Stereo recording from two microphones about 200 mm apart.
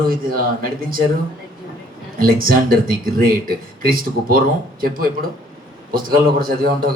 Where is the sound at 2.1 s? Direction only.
45° right (ahead or behind).